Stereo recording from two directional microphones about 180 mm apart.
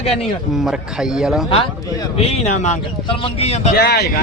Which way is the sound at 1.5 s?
30° left (ahead or behind).